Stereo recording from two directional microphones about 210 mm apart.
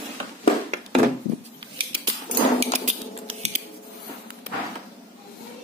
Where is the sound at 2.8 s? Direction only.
30° right (ahead or behind).